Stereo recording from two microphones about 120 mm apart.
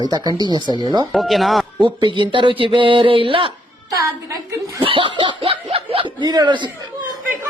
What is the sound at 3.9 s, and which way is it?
Speech, 25° right (ahead or behind).